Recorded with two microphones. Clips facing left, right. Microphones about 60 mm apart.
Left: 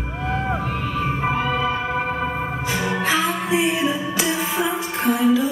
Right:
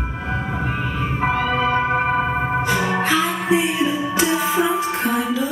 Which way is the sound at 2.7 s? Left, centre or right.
Right.